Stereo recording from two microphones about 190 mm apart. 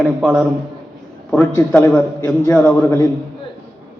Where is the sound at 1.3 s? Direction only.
10° left (ahead or behind).